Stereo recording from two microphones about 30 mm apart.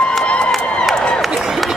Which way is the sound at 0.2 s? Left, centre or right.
Left.